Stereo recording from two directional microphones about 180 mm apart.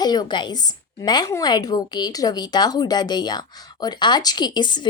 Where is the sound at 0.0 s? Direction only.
20° left (ahead or behind).